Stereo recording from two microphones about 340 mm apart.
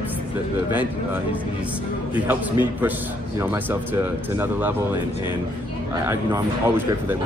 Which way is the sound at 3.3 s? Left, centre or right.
Centre.